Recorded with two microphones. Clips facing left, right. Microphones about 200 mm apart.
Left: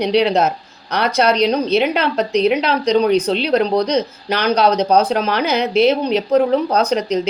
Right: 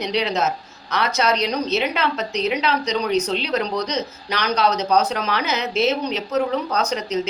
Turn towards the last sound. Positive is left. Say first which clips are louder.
# left 6 dB
turn(degrees=60)  # may be behind; listen again after turning